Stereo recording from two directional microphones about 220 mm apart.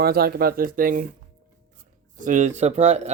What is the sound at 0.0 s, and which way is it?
Speech, 45° right (ahead or behind).